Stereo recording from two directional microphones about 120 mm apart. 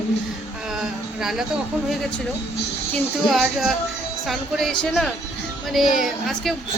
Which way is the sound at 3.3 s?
5° right (ahead or behind).